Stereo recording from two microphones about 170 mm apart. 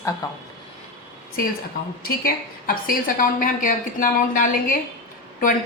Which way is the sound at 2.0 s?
60° left (ahead or behind).